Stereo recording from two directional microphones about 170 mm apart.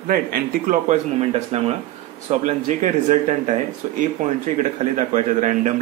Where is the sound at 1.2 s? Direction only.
35° right (ahead or behind).